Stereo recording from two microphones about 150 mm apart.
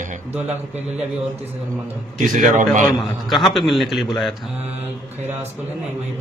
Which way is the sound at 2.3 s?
55° right (ahead or behind).